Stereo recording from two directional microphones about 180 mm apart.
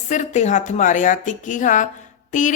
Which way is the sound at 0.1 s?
40° left (ahead or behind).